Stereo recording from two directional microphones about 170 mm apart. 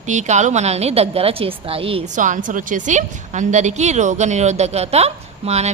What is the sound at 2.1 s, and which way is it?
A woman's voice, 50° right (ahead or behind).